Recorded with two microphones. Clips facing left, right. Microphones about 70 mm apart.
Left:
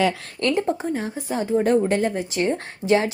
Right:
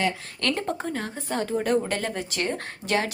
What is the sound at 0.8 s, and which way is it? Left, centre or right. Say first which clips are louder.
Speech: left 4 dB; centre.